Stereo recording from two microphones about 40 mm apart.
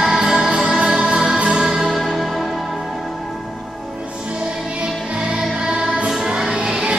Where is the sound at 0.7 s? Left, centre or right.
Right.